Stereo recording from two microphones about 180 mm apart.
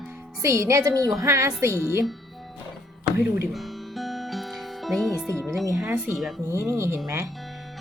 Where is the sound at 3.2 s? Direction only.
10° right (ahead or behind).